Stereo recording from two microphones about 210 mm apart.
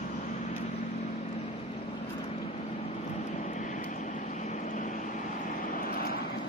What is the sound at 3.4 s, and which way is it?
Vehicle, 35° left (ahead or behind).